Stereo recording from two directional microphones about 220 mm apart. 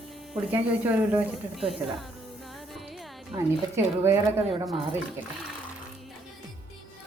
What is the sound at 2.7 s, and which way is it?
Music, centre (ahead or behind).